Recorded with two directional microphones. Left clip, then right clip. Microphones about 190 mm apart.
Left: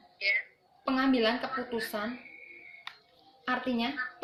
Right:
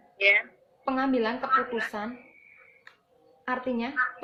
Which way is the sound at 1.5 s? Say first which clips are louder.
Right 9 dB; 30° right (ahead or behind).